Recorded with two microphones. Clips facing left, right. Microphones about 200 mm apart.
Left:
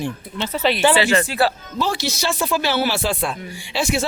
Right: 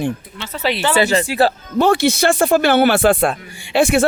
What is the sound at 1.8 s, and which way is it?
Speech, 55° right (ahead or behind).